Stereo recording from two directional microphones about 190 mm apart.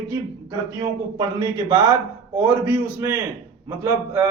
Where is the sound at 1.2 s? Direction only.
25° right (ahead or behind).